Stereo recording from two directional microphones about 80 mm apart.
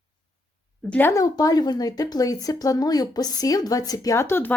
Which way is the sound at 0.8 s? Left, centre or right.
Left.